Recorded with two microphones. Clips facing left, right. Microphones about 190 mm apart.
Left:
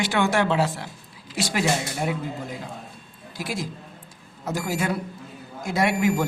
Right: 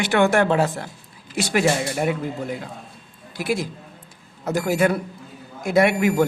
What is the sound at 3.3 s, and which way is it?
A woman's voice, 60° right (ahead or behind).